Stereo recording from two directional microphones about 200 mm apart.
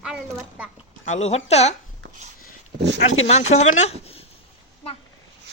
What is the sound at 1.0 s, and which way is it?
Speech, 35° left (ahead or behind).